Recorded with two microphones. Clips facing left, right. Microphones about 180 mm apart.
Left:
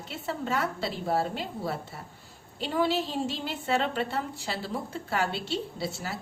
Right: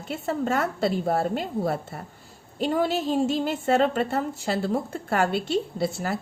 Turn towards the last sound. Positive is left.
turn(degrees=-50)  # may be behind; listen again after turning